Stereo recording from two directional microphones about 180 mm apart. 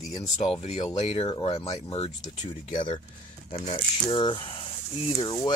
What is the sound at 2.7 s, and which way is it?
Speech, 25° left (ahead or behind).